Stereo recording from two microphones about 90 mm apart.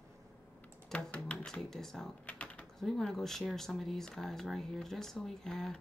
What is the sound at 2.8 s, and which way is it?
Speech, 5° left (ahead or behind).